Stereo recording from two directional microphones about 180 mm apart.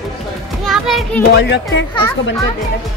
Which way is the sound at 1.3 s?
75° left (ahead or behind).